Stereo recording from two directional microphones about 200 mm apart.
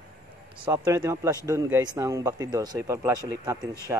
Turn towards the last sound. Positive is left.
turn(degrees=-10)  # may be behind; listen again after turning